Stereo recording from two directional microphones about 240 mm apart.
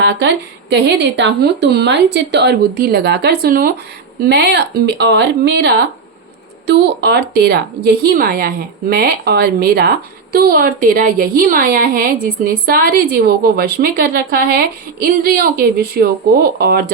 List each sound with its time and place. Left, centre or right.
0.0 s a woman's voice: right